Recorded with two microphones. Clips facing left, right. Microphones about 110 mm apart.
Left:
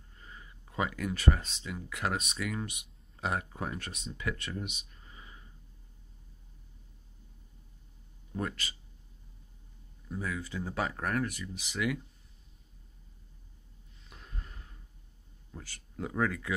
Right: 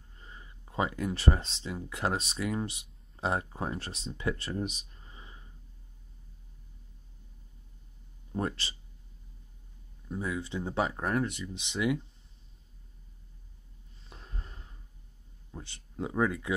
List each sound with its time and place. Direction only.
0.2 s speech: 25° right (ahead or behind)
8.3 s speech: 30° right (ahead or behind)
10.0 s speech: 20° right (ahead or behind)
14.0 s a sound: 30° right (ahead or behind)
15.5 s speech: 20° right (ahead or behind)